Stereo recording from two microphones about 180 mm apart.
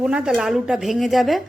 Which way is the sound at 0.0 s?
5° right (ahead or behind).